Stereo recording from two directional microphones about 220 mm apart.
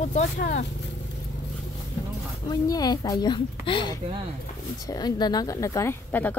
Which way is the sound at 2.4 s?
20° left (ahead or behind).